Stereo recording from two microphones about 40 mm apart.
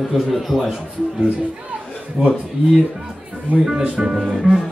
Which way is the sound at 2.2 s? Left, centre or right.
Right.